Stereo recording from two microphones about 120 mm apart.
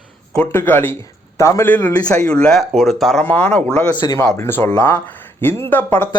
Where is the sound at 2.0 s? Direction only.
10° left (ahead or behind).